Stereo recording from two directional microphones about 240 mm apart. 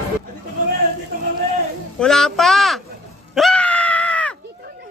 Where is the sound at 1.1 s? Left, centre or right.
Right.